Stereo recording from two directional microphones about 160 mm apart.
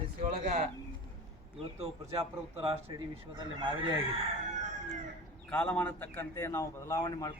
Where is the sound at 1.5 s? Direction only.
40° right (ahead or behind).